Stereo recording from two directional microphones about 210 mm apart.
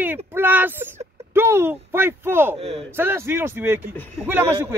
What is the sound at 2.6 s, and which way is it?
Speech, 30° right (ahead or behind).